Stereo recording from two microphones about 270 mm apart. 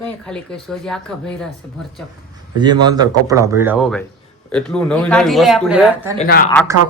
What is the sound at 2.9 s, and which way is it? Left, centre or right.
Speech, centre.